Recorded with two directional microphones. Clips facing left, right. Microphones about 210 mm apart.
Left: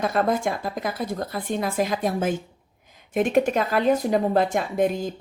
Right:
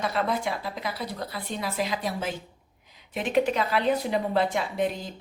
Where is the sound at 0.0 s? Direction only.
50° left (ahead or behind).